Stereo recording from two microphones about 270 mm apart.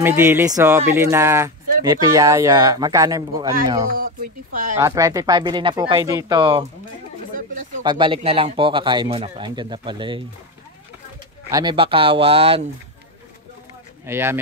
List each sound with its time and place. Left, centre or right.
0.0 s speech: centre
4.0 s speech: right
4.7 s speech: centre
7.8 s speech: centre
11.5 s speech: centre
14.0 s speech: centre